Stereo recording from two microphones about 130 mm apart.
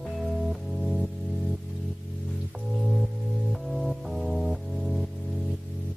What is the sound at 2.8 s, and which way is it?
Music, centre (ahead or behind).